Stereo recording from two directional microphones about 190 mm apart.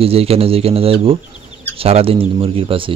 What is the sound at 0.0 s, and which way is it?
A man's voice, 30° right (ahead or behind).